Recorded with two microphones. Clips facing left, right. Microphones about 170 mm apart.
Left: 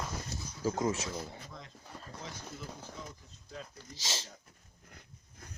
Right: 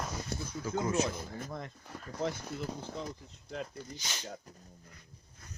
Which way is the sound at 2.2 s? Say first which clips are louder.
Right 12 dB; 65° right (ahead or behind).